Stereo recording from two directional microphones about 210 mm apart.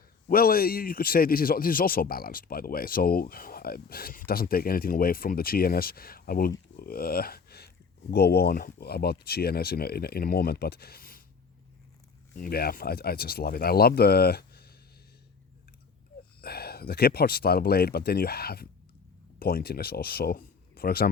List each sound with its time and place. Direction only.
0.3 s a man's voice: 45° left (ahead or behind)
12.3 s a man's voice: 45° left (ahead or behind)
16.4 s a man's voice: 50° left (ahead or behind)